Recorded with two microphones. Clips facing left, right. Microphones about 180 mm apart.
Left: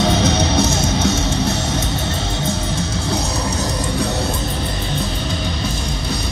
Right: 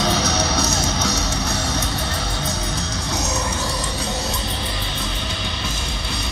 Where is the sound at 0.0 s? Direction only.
25° left (ahead or behind).